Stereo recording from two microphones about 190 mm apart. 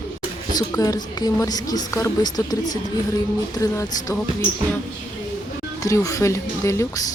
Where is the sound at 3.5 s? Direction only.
20° left (ahead or behind).